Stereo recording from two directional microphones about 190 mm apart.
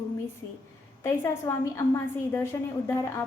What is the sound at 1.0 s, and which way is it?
A woman's voice, 15° left (ahead or behind).